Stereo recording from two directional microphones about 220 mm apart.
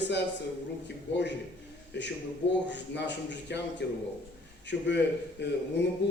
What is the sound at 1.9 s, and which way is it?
A man's voice, 55° left (ahead or behind).